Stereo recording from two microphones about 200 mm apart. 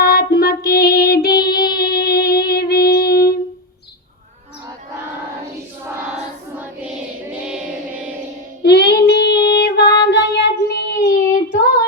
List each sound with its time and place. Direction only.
0.0 s child singing: 50° left (ahead or behind)
8.6 s child singing: 55° left (ahead or behind)